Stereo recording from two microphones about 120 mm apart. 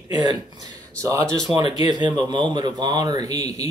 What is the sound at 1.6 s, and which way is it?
Speech, 35° right (ahead or behind).